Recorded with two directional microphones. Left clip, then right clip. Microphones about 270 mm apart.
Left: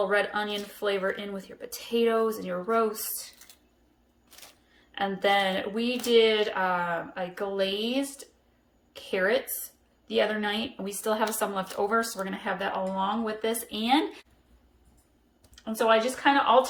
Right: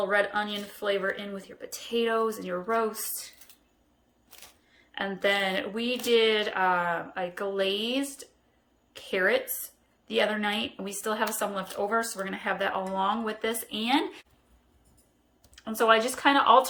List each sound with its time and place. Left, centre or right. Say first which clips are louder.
0.1 s speech: even; centre
4.9 s speech: left 2 dB; centre
15.5 s speech: right 1 dB; centre